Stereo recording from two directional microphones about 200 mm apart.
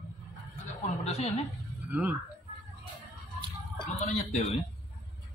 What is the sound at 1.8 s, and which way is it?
Speech, 5° right (ahead or behind).